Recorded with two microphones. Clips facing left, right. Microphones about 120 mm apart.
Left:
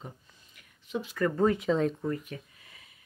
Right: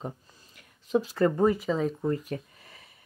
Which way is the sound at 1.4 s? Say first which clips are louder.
Right 1 dB; centre (ahead or behind).